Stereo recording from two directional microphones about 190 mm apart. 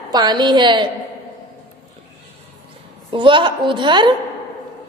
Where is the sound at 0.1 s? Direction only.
20° right (ahead or behind).